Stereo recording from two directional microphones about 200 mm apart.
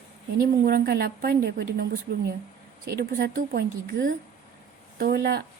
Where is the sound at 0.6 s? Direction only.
50° right (ahead or behind).